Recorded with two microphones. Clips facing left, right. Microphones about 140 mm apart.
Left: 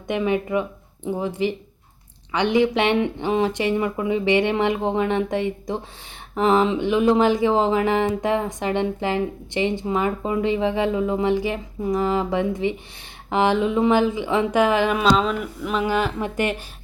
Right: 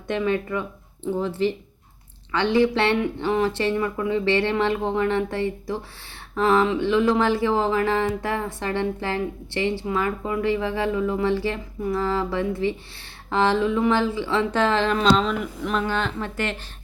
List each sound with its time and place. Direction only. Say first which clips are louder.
0.1 s speech: left 2 dB; 15° left (ahead or behind)